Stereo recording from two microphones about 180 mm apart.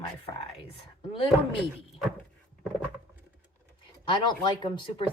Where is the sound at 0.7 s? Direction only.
30° left (ahead or behind).